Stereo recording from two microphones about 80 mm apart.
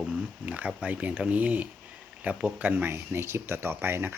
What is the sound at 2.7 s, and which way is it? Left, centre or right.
Speech, right.